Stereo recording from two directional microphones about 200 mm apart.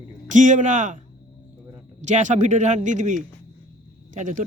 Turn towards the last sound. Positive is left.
turn(degrees=-40)  # may be behind; listen again after turning